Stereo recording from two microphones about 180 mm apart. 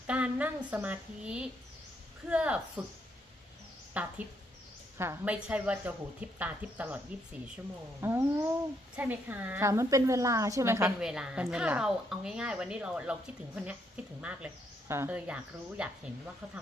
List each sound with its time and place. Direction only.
0.1 s a woman's voice: 10° right (ahead or behind)
4.0 s speech: 10° right (ahead or behind)
8.0 s speech: 15° right (ahead or behind)
11.0 s a woman's voice: 5° right (ahead or behind)